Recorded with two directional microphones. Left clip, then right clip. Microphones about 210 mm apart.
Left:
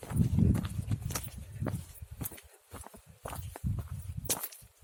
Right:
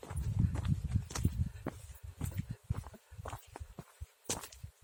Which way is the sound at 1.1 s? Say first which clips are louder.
Right 2 dB; 50° left (ahead or behind).